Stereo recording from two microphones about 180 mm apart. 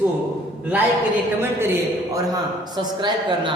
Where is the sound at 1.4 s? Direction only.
10° right (ahead or behind).